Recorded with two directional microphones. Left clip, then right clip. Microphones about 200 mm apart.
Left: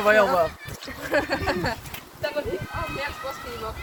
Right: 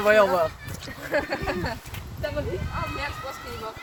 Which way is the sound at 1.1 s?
60° left (ahead or behind).